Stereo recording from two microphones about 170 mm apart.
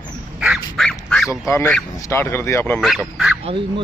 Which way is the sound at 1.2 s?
15° left (ahead or behind).